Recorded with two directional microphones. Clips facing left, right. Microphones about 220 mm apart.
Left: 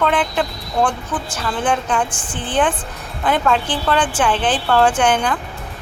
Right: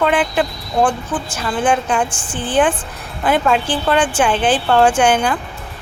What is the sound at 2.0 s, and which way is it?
Speech, 30° right (ahead or behind).